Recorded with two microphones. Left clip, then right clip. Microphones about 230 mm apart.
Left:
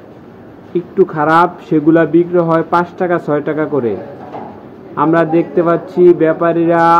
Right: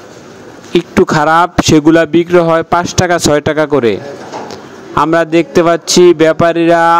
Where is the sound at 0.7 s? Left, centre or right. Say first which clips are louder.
Right 4 dB; right.